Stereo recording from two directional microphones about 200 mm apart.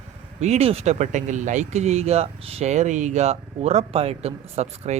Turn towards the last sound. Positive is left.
turn(degrees=-30)  # may be behind; listen again after turning